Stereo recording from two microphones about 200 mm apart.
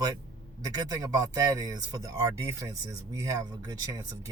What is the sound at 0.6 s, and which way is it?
Speech, 15° right (ahead or behind).